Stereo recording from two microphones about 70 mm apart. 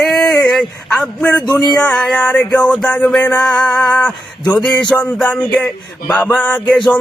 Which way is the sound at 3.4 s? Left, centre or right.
Centre.